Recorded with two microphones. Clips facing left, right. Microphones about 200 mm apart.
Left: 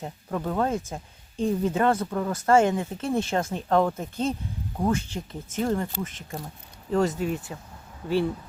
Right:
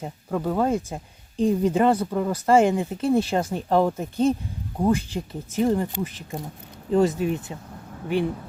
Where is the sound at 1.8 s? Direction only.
15° right (ahead or behind).